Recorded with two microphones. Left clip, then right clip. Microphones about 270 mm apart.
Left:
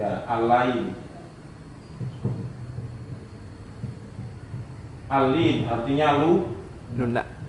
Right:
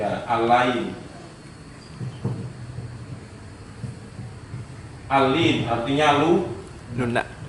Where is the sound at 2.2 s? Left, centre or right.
Centre.